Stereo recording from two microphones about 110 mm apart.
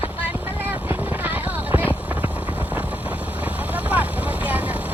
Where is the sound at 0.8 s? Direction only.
15° right (ahead or behind).